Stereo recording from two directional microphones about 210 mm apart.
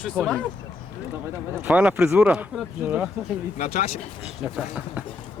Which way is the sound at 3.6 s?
30° left (ahead or behind).